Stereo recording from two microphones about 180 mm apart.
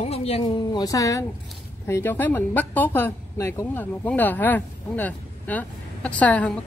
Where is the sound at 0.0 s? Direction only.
35° left (ahead or behind).